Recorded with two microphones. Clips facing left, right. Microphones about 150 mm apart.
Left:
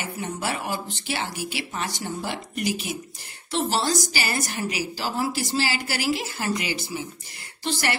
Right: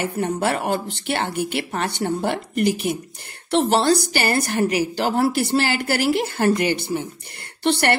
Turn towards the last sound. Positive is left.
turn(degrees=-65)  # may be behind; listen again after turning